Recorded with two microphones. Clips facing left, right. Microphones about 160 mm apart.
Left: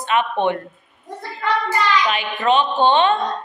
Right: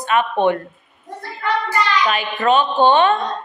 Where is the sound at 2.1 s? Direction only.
45° right (ahead or behind).